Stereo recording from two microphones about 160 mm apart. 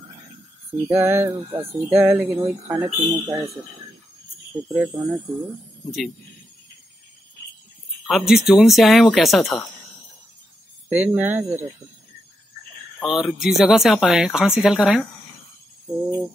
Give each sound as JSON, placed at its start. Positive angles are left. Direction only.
{"t": 0.7, "sound": "speech", "side_deg": -10}
{"t": 4.6, "sound": "speech", "side_deg": -10}
{"t": 8.1, "sound": "speech", "side_deg": 0}
{"t": 10.9, "sound": "speech", "side_deg": -10}
{"t": 13.0, "sound": "speech", "side_deg": -5}